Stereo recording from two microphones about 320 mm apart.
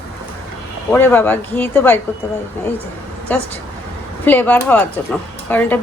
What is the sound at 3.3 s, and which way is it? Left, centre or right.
A woman's voice, centre.